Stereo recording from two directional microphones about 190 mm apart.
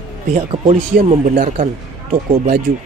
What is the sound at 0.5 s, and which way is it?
Speech, 30° right (ahead or behind).